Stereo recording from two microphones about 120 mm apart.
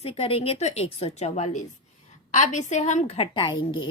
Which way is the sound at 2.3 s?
90° left.